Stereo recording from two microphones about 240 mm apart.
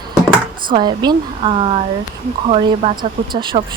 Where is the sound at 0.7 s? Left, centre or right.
Centre.